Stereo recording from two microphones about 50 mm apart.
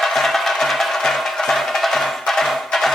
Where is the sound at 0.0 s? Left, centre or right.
Centre.